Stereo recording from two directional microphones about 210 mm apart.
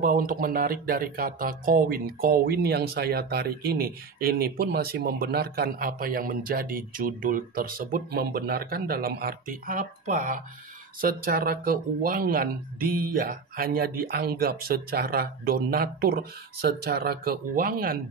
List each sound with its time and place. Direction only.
0.0 s speech: 40° right (ahead or behind)